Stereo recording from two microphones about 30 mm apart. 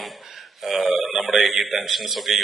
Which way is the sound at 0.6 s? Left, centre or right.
Centre.